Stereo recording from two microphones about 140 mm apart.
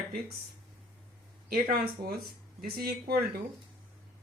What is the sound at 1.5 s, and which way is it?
Speech, 90° right.